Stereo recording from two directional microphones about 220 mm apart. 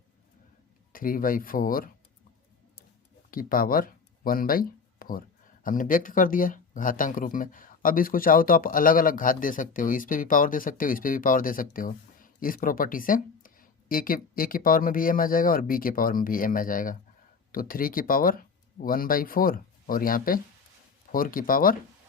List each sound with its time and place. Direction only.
0.9 s speech: 40° left (ahead or behind)
3.3 s speech: 40° left (ahead or behind)